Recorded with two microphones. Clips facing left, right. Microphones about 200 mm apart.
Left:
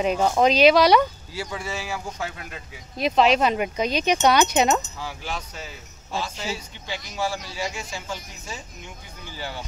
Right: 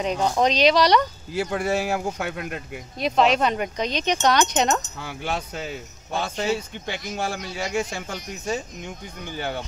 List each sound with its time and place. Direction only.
0.0 s speech: 5° left (ahead or behind)
1.3 s speech: 60° right (ahead or behind)
3.0 s speech: centre (ahead or behind)
4.9 s speech: 60° right (ahead or behind)